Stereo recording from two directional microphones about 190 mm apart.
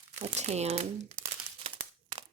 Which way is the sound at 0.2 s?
35° right (ahead or behind).